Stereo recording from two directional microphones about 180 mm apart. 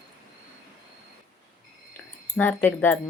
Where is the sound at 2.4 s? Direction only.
10° left (ahead or behind).